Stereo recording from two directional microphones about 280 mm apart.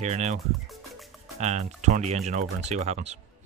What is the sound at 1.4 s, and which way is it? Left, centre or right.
Speech, right.